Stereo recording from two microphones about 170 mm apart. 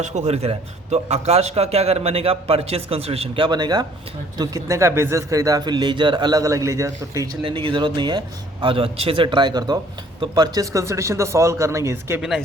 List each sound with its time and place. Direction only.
0.0 s a man's voice: 40° right (ahead or behind); by 12.2 s 15° right (ahead or behind)